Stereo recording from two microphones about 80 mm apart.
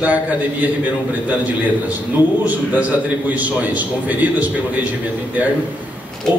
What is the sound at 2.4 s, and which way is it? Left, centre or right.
A man's voice, centre.